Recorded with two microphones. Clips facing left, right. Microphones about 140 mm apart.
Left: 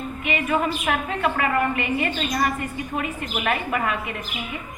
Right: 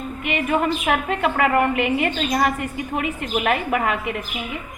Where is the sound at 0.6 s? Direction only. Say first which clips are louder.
Right 3 dB; 65° right (ahead or behind).